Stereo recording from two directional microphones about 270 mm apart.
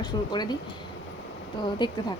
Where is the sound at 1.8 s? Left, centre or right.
Centre.